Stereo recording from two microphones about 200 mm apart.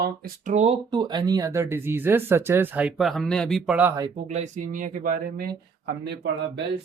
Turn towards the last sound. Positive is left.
turn(degrees=-60)  # may be behind; listen again after turning